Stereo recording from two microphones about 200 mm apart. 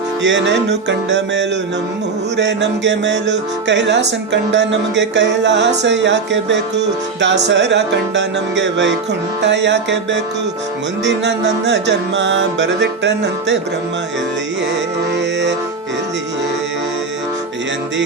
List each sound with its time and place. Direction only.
0.2 s music: 65° right (ahead or behind)